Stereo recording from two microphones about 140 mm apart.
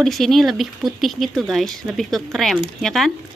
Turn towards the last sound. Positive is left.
turn(degrees=0)  # may be behind; listen again after turning